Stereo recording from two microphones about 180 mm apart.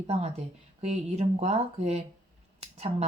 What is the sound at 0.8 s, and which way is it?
Speech, 40° right (ahead or behind).